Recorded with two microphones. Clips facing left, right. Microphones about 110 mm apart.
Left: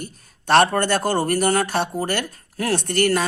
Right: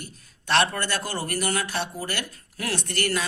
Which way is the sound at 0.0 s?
45° left (ahead or behind).